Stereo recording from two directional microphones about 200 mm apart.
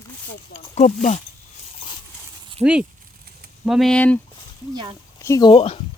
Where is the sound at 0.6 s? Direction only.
35° left (ahead or behind).